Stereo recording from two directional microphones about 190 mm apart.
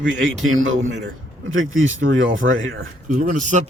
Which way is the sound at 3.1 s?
40° right (ahead or behind).